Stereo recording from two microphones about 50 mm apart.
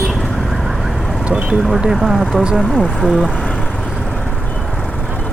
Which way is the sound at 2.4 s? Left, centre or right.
Centre.